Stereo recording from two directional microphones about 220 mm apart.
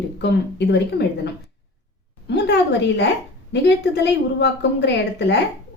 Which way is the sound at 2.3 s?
50° left (ahead or behind).